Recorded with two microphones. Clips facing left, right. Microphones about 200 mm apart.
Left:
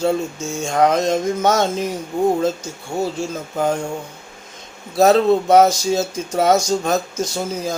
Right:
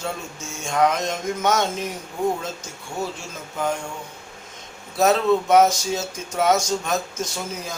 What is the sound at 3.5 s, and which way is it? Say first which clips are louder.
Speech: left 5 dB; 35° left (ahead or behind).